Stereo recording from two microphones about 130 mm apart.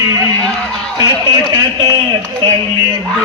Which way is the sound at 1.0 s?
30° right (ahead or behind).